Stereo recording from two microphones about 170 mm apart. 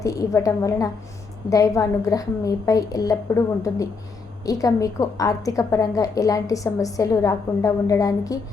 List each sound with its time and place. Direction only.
0.0 s a woman's voice: 20° left (ahead or behind)